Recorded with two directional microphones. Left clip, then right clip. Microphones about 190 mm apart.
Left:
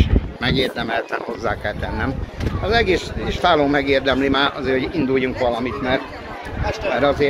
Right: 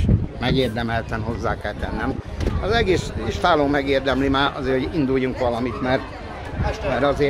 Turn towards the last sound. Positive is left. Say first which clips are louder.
# left 2 dB
turn(degrees=-5)  # may be behind; listen again after turning